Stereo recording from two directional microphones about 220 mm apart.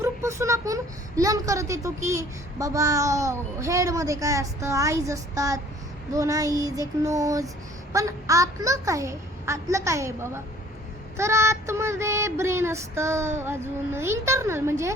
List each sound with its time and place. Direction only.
0.0 s speech: 10° right (ahead or behind)